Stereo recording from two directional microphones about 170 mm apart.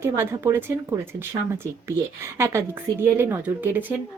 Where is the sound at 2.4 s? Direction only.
15° right (ahead or behind).